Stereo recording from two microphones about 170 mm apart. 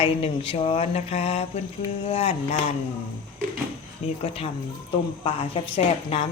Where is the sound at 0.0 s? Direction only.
35° left (ahead or behind).